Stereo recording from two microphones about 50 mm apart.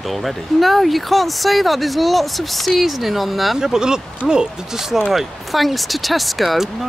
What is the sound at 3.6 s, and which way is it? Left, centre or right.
Speech, centre.